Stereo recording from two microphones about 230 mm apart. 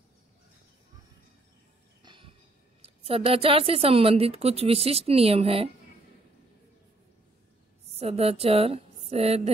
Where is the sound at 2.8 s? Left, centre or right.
Right.